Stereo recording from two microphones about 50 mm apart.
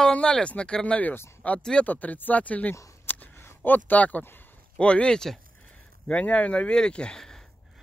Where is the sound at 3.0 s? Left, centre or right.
Left.